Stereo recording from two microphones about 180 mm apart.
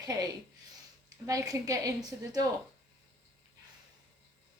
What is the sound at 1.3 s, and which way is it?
Speech, 20° right (ahead or behind).